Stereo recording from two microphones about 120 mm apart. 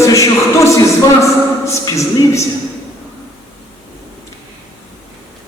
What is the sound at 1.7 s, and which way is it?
Speech, 25° left (ahead or behind).